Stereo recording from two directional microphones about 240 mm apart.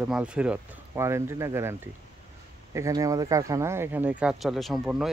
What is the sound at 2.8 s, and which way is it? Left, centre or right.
Speech, centre.